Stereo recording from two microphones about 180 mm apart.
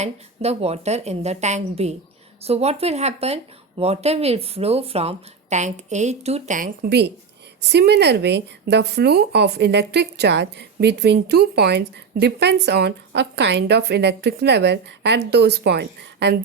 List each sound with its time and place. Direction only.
0.0 s speech: 35° right (ahead or behind); by 16.3 s 65° right (ahead or behind)